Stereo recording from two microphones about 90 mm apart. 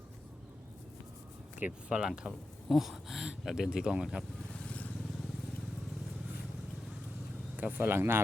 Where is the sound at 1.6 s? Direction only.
10° right (ahead or behind).